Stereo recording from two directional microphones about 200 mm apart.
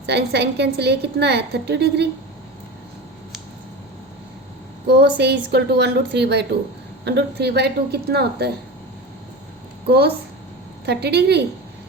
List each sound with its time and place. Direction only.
0.0 s a woman's voice: 55° right (ahead or behind)
4.9 s a woman's voice: 55° right (ahead or behind)
10.8 s a woman's voice: 55° right (ahead or behind)